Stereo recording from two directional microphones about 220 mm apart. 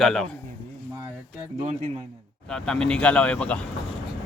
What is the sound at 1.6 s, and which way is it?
Speech, 30° right (ahead or behind).